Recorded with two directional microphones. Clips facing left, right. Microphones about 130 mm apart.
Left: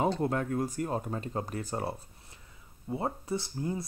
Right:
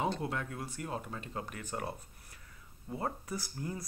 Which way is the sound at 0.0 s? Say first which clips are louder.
Left 6 dB; 45° left (ahead or behind).